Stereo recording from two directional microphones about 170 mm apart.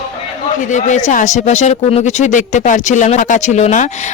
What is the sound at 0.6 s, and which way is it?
Speech, 45° left (ahead or behind).